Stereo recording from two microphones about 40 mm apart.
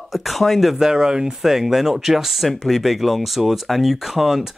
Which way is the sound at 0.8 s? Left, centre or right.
Centre.